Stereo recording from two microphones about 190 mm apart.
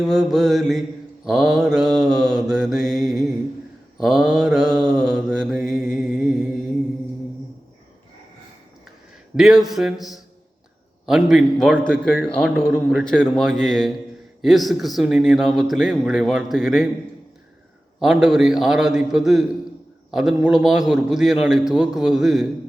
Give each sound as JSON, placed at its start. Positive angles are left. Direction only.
{"t": 0.0, "sound": "a man's voice", "side_deg": 0}
{"t": 3.9, "sound": "mantra", "side_deg": 0}
{"t": 9.3, "sound": "a man's voice", "side_deg": -5}
{"t": 18.0, "sound": "a man's voice", "side_deg": -5}